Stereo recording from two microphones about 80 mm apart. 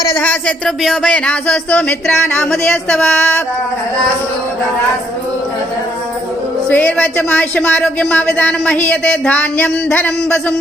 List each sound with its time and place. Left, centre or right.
0.2 s speech: centre
0.8 s speech: centre
6.7 s speech: centre